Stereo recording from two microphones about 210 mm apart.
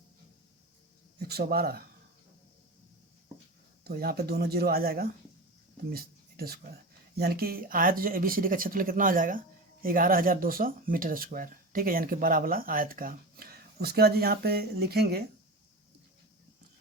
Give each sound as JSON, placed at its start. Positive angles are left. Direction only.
{"t": 1.3, "sound": "speech", "side_deg": -50}
{"t": 3.8, "sound": "speech", "side_deg": -45}